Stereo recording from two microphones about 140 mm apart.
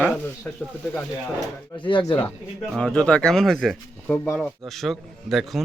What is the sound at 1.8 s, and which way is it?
Speech, 35° left (ahead or behind).